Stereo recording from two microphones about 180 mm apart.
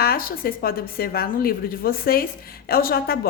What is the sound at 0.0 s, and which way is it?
A woman's voice, 55° left (ahead or behind).